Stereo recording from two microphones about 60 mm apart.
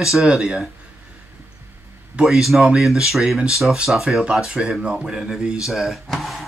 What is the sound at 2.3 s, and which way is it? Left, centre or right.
Speech, centre.